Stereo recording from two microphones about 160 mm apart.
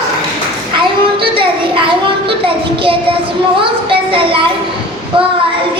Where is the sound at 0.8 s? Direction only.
35° right (ahead or behind).